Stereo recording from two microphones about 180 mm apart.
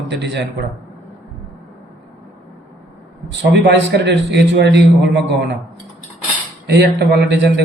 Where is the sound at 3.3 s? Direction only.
75° right (ahead or behind).